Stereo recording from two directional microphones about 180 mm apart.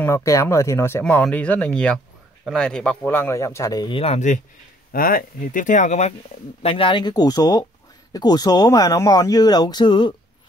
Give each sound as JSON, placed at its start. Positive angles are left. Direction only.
{"t": 0.0, "sound": "speech", "side_deg": 15}
{"t": 4.9, "sound": "speech", "side_deg": 50}